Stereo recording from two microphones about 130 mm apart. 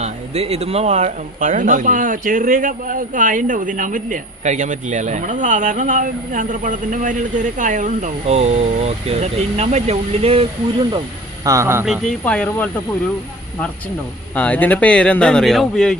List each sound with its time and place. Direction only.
0.0 s speech: 55° right (ahead or behind)
11.4 s speech: 20° right (ahead or behind)
12.2 s speech: 10° left (ahead or behind)
14.3 s speech: 10° left (ahead or behind)